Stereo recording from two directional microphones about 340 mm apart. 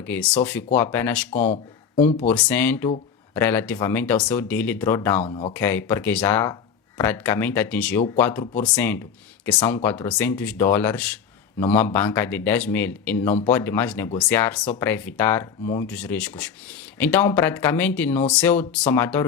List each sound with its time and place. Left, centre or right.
0.0 s speech: centre
5.5 s speech: centre